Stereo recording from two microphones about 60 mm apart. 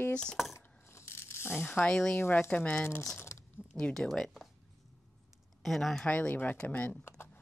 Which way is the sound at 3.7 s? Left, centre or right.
Centre.